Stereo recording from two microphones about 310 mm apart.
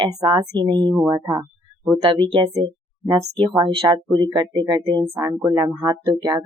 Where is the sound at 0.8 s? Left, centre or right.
Centre.